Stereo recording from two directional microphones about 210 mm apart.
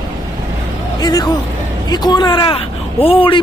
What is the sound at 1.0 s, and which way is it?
A man's voice, 20° left (ahead or behind).